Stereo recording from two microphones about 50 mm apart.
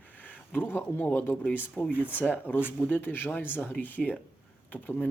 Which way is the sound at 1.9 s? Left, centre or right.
Right.